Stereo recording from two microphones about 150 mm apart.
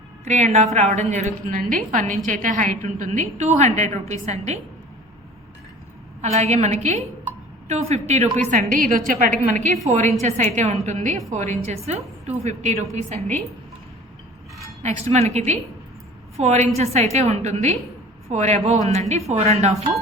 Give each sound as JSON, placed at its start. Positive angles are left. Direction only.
{"t": 0.3, "sound": "a woman's voice", "side_deg": -50}
{"t": 6.2, "sound": "a woman's voice", "side_deg": -50}
{"t": 10.2, "sound": "a woman's voice", "side_deg": -50}
{"t": 14.8, "sound": "a woman's voice", "side_deg": -50}